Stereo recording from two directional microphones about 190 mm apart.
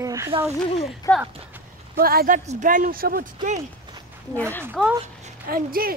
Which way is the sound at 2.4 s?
40° right (ahead or behind).